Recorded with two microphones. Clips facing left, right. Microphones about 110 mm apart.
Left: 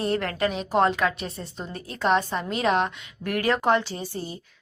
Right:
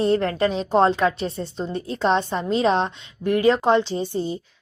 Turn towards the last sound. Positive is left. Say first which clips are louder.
# right 8 dB
turn(degrees=-25)  # may be behind; listen again after turning